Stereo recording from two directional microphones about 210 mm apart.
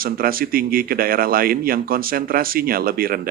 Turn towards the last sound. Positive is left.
turn(degrees=-45)  # may be behind; listen again after turning